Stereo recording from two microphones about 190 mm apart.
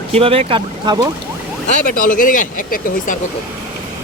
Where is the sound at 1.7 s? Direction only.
45° left (ahead or behind).